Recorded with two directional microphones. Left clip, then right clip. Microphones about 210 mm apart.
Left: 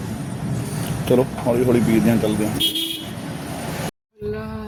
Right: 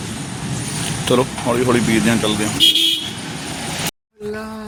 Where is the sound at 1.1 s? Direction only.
10° left (ahead or behind).